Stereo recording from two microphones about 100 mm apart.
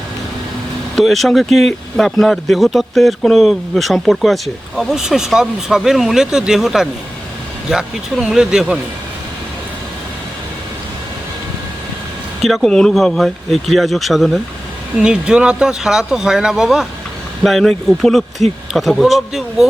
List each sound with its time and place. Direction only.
0.9 s speech: centre (ahead or behind)
12.4 s speech: centre (ahead or behind)